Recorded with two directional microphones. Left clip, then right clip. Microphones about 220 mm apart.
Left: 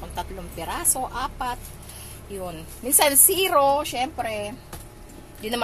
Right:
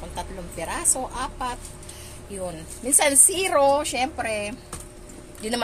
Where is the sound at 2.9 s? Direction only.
5° left (ahead or behind).